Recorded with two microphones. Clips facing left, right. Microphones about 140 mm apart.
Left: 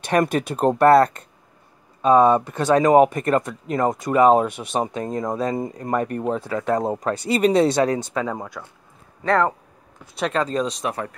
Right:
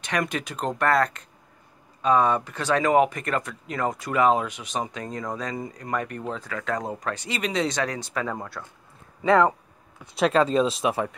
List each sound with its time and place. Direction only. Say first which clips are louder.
0.1 s speech: left 8 dB; 50° left (ahead or behind)
0.7 s speech: left 8 dB; 35° left (ahead or behind)
2.1 s speech: left 8 dB; 30° left (ahead or behind)
2.7 s speech: left 6 dB; 40° left (ahead or behind)
4.5 s speech: left 7 dB; 55° left (ahead or behind)
5.0 s speech: left 7 dB; 25° left (ahead or behind)
5.9 s speech: left 7 dB; 40° left (ahead or behind)
8.3 s speech: left 3 dB; 10° left (ahead or behind)
9.2 s speech: right 1 dB; 5° right (ahead or behind)